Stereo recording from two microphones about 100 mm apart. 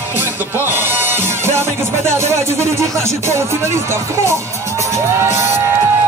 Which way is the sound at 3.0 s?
25° right (ahead or behind).